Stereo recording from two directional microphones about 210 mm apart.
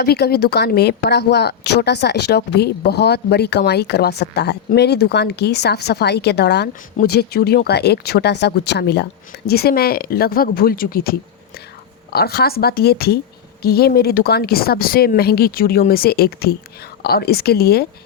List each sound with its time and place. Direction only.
0.0 s a woman's voice: 50° left (ahead or behind)